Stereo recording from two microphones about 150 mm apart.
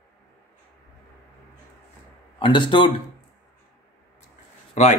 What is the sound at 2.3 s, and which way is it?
Speech, 35° left (ahead or behind).